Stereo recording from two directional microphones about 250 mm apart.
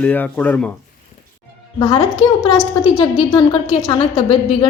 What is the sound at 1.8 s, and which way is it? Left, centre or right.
A woman's voice, centre.